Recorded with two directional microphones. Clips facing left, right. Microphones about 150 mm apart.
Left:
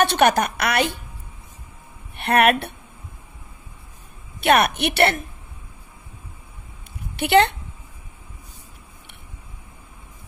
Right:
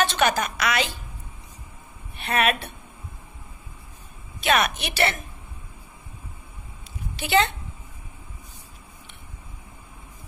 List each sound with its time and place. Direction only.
0.0 s a woman's voice: 60° left (ahead or behind)
2.1 s speech: 65° left (ahead or behind)
4.4 s a woman's voice: 60° left (ahead or behind)
7.2 s a woman's voice: 65° left (ahead or behind)